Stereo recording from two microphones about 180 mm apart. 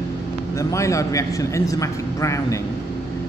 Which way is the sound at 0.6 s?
15° left (ahead or behind).